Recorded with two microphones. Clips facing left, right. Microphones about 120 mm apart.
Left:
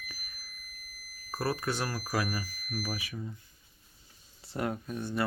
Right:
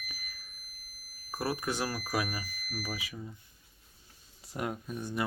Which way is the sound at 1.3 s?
15° right (ahead or behind).